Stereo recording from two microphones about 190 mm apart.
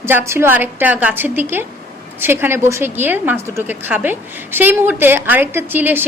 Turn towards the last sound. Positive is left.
turn(degrees=-10)  # may be behind; listen again after turning